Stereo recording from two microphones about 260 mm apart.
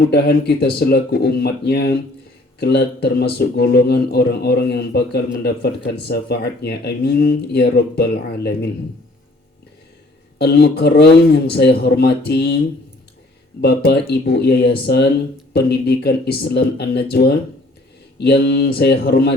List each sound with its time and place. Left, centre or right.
0.0 s a man's voice: left
10.3 s a man's voice: left